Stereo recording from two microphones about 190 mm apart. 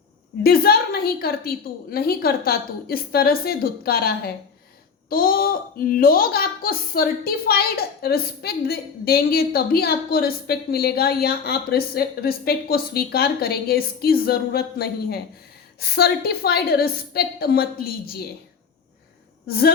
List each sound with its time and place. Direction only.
0.4 s a woman's voice: 55° left (ahead or behind)
19.5 s a woman's voice: 55° left (ahead or behind)